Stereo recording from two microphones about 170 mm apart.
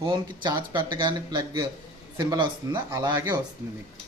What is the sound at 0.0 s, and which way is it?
Speech, 25° right (ahead or behind).